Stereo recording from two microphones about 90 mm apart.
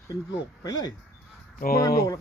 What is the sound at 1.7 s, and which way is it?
Speech, 35° left (ahead or behind).